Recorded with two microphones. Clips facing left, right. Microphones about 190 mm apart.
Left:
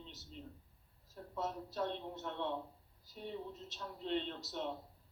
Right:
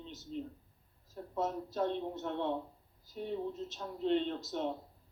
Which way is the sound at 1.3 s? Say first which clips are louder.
Right 5 dB; 45° right (ahead or behind).